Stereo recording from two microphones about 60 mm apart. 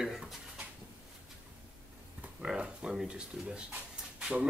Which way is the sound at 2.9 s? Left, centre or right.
Centre.